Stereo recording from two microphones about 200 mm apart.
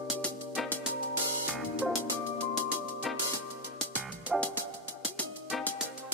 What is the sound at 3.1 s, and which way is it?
Music, centre (ahead or behind).